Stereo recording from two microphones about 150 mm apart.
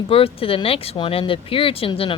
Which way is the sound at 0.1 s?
40° left (ahead or behind).